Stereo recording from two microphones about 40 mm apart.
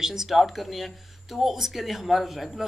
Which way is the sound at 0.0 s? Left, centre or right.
Centre.